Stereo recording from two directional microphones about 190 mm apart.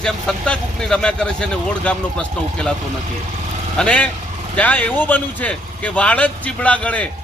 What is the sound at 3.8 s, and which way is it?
Speech, 5° left (ahead or behind).